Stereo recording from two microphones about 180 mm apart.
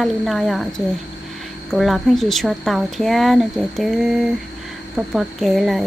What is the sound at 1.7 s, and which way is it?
Speech, centre (ahead or behind).